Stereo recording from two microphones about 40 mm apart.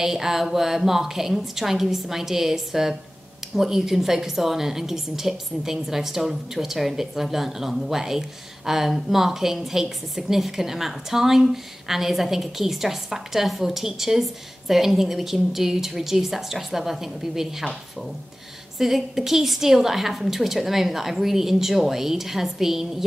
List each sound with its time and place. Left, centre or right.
0.0 s a woman's voice: centre
18.8 s a woman's voice: centre